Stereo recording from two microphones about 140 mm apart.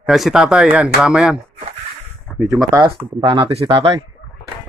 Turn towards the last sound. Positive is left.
turn(degrees=-40)  # may be behind; listen again after turning